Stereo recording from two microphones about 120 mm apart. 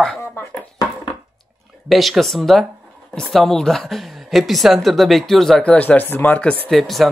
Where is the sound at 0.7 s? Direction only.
35° left (ahead or behind).